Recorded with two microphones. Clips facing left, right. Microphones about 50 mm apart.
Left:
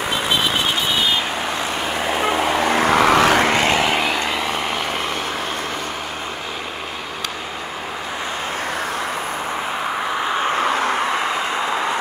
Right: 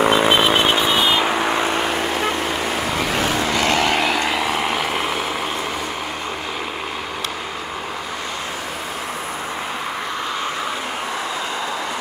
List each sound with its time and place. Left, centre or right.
0.0 s vehicle: right
2.1 s vehicle: centre
2.7 s vehicle: left
3.6 s vehicle: centre
3.9 s vehicle: centre